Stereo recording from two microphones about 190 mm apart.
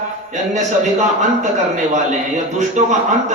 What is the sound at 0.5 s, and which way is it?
A man's voice, 40° right (ahead or behind).